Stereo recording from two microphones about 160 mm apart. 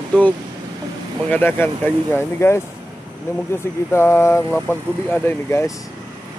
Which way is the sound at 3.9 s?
15° left (ahead or behind).